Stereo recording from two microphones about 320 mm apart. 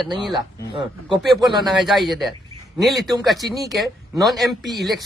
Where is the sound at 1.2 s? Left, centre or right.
Centre.